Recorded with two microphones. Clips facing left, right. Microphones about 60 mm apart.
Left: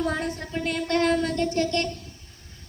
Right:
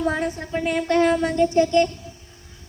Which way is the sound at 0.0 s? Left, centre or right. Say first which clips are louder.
Right 4 dB; centre.